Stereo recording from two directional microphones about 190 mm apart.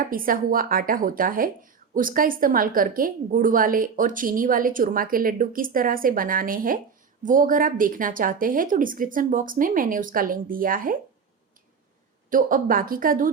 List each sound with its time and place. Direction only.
0.0 s speech: 50° right (ahead or behind)
12.3 s speech: 45° right (ahead or behind)